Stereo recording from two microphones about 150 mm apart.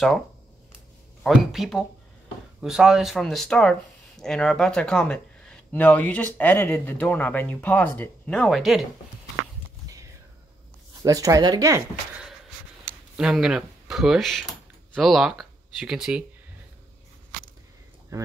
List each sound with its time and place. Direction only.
1.2 s speech: centre (ahead or behind)
11.0 s speech: 20° right (ahead or behind)
13.1 s speech: centre (ahead or behind)
18.1 s speech: 25° right (ahead or behind)